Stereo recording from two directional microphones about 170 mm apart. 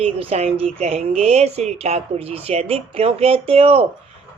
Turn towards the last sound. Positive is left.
turn(degrees=-35)  # may be behind; listen again after turning